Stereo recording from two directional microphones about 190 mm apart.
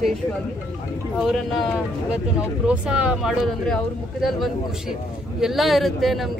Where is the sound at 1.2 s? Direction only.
Centre (ahead or behind).